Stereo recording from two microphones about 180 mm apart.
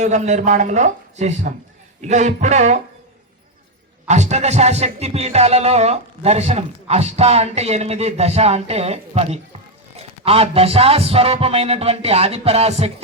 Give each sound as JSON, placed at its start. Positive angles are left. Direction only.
{"t": 0.0, "sound": "music", "side_deg": -40}
{"t": 4.0, "sound": "music", "side_deg": -40}